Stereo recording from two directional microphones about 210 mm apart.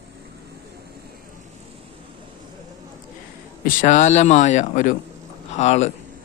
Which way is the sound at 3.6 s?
40° left (ahead or behind).